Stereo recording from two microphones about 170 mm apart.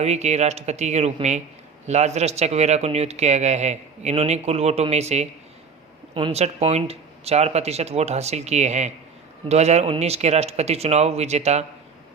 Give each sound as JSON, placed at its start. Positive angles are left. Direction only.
{"t": 0.0, "sound": "speech", "side_deg": -40}
{"t": 6.1, "sound": "speech", "side_deg": -30}
{"t": 6.4, "sound": "speech", "side_deg": -40}